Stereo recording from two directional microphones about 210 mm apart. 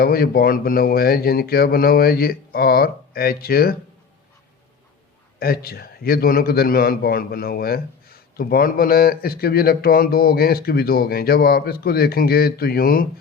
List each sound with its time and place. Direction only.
0.0 s a man's voice: 45° left (ahead or behind)
5.4 s a man's voice: 45° left (ahead or behind)